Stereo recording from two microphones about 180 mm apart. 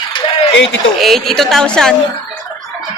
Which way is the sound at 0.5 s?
80° left.